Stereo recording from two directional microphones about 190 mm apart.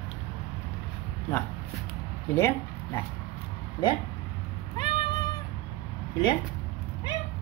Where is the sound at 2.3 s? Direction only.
10° left (ahead or behind).